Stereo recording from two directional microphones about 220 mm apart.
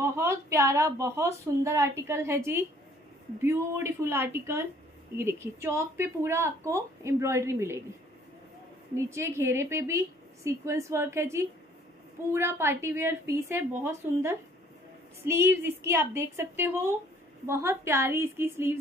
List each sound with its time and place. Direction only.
0.0 s speech: 10° right (ahead or behind)
8.9 s speech: 10° right (ahead or behind)